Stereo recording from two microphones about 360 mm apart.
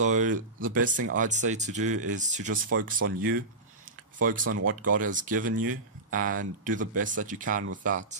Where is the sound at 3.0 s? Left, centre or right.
Right.